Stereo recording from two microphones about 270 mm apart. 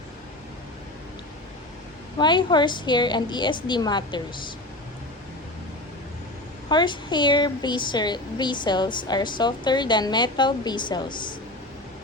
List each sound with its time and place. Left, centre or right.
2.1 s speech: centre
6.7 s speech: centre